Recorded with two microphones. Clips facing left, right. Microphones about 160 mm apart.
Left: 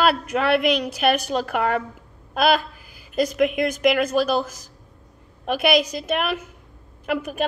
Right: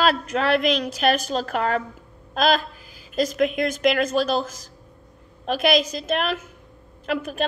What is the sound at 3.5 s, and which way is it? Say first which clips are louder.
A woman's voice: left 1 dB; 10° left (ahead or behind).